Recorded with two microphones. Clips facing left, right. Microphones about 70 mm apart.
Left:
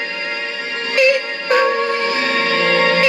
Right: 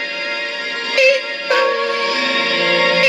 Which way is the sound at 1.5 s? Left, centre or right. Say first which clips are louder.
Even; left.